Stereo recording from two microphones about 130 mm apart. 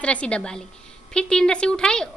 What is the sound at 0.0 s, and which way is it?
A woman's voice, 10° left (ahead or behind).